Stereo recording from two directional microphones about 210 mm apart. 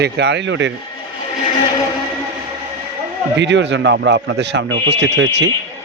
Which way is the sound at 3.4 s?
55° right (ahead or behind).